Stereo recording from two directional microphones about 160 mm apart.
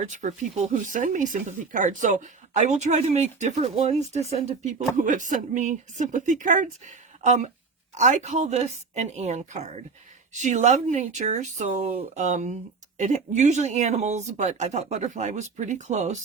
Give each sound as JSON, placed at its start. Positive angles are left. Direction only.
{"t": 0.1, "sound": "speech", "side_deg": -50}